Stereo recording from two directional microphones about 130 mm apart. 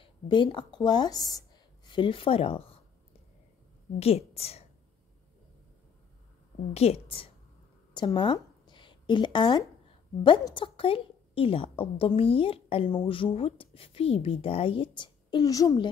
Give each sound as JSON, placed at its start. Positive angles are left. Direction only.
{"t": 0.0, "sound": "a woman's voice", "side_deg": 40}
{"t": 1.9, "sound": "speech", "side_deg": 40}
{"t": 4.0, "sound": "a woman's voice", "side_deg": 50}
{"t": 6.7, "sound": "a woman's voice", "side_deg": 55}
{"t": 7.9, "sound": "a sound", "side_deg": 35}
{"t": 10.5, "sound": "a woman's voice", "side_deg": 45}